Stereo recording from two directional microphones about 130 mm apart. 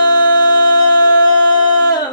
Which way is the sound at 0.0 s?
30° left (ahead or behind).